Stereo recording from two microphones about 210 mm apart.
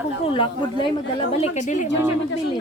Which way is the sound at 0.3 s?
25° left (ahead or behind).